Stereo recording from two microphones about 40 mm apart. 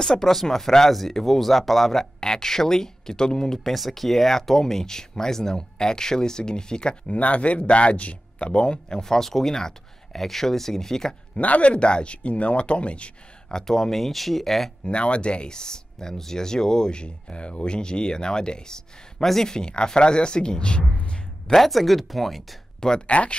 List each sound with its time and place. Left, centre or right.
0.0 s speech: centre
2.1 s speech: centre
3.5 s speech: centre; by 7.0 s left
7.1 s speech: left; by 11.1 s centre
11.3 s speech: left
13.5 s speech: centre
14.9 s speech: left
19.2 s speech: centre
19.5 s speech: left
21.5 s speech: centre
22.8 s speech: left